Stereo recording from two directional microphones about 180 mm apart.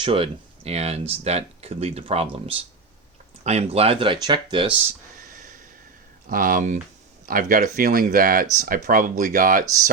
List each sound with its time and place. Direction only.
0.0 s speech: 30° right (ahead or behind)
6.2 s speech: 50° right (ahead or behind)